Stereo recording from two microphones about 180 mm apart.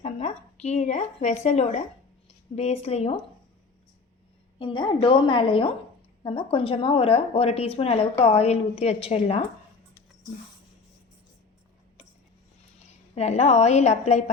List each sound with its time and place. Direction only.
0.0 s a woman's voice: 40° left (ahead or behind)
4.6 s a woman's voice: 30° left (ahead or behind)
13.1 s speech: 40° left (ahead or behind)